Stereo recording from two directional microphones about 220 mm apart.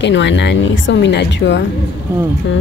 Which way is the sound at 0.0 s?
55° left (ahead or behind).